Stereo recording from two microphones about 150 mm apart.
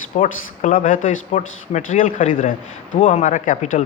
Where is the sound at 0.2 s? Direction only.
60° left (ahead or behind).